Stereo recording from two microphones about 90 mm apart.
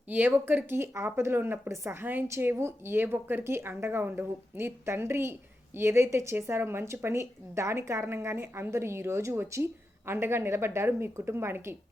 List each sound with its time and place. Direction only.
0.1 s speech: 20° right (ahead or behind)